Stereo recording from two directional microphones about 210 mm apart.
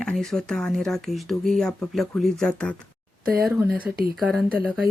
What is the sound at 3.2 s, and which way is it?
Speech, 45° right (ahead or behind).